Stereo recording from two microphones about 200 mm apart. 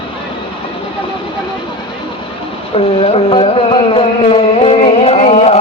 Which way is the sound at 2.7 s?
30° left (ahead or behind).